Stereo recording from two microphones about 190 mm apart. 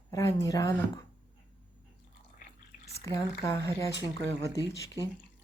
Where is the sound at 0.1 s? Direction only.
15° left (ahead or behind).